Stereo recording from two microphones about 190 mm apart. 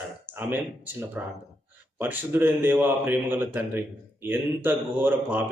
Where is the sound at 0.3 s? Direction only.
10° right (ahead or behind).